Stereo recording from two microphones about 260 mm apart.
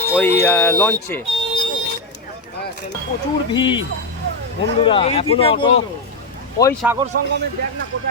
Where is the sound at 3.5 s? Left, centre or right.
Centre.